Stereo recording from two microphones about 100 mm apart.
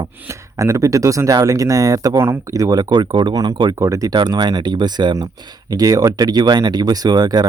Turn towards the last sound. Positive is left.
turn(degrees=-40)  # may be behind; listen again after turning